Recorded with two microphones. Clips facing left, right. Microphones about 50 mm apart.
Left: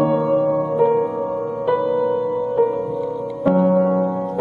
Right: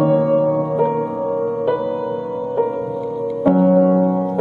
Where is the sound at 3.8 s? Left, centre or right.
Right.